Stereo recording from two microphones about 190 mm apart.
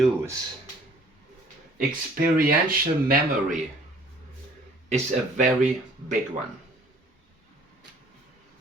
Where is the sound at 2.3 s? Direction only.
50° right (ahead or behind).